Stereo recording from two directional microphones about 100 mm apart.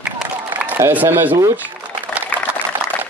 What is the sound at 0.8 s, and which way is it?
Speech, 20° right (ahead or behind).